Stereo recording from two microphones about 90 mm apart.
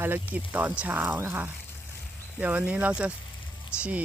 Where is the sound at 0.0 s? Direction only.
20° right (ahead or behind).